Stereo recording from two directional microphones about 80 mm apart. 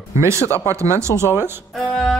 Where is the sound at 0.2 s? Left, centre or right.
Right.